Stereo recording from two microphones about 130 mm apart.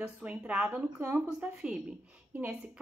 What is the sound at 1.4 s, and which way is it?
Speech, 10° right (ahead or behind).